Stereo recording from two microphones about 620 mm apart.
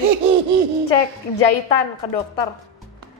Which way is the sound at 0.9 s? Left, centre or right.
Left.